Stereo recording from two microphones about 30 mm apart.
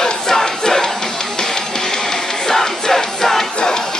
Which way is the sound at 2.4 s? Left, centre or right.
Centre.